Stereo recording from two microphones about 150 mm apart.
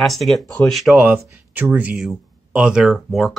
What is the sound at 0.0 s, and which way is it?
Speech, centre (ahead or behind).